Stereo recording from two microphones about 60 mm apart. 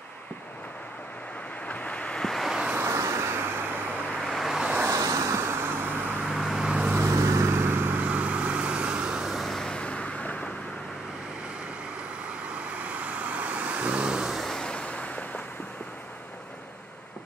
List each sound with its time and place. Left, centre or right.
1.7 s waves: left
2.2 s vehicle: centre
2.8 s vehicle: right
4.1 s vehicle: centre
4.6 s vehicle: centre
4.9 s vehicle: right
6.2 s vehicle: centre
7.1 s vehicle: right
8.0 s vehicle: right; by 9.7 s centre
9.7 s vehicle: centre
12.5 s vehicle: right
14.4 s vehicle: centre